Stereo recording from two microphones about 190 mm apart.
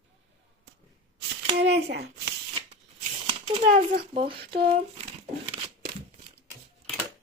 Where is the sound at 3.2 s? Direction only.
30° right (ahead or behind).